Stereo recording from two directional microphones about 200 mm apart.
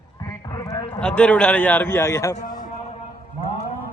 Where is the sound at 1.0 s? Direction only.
5° left (ahead or behind).